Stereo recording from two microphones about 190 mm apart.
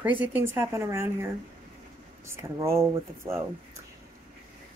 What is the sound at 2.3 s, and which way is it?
Speech, 15° right (ahead or behind).